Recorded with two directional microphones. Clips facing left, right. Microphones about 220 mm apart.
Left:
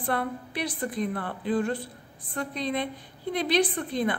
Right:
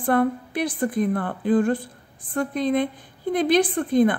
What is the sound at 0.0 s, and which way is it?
A woman's voice, 50° right (ahead or behind).